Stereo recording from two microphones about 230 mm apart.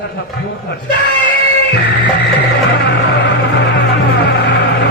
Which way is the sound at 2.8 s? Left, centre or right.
Left.